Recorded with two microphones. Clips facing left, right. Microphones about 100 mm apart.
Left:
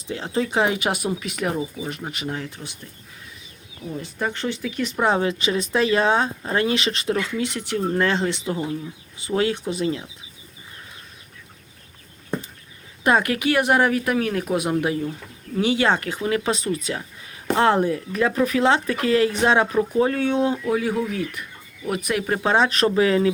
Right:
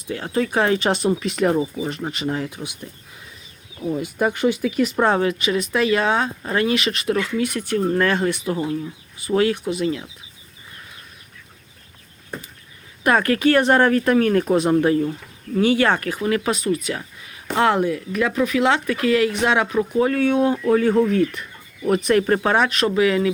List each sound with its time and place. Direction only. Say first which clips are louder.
0.1 s speech: right 2 dB; 20° left (ahead or behind); by 2.6 s 5° right (ahead or behind)
3.9 s speech: right 5 dB; 10° right (ahead or behind)
5.0 s speech: left 3 dB; 20° left (ahead or behind)
13.1 s speech: right 3 dB; 15° left (ahead or behind)
15.6 s speech: right 2 dB; 20° left (ahead or behind)
20.7 s speech: right 7 dB; 5° left (ahead or behind)
22.4 s speech: even; 25° left (ahead or behind)